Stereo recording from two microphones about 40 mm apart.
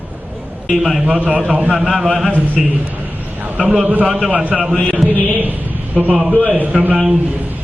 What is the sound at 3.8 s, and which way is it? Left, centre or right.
Speech, right.